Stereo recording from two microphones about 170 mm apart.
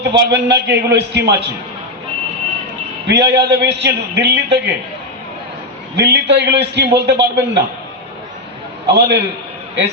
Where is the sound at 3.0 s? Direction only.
85° right.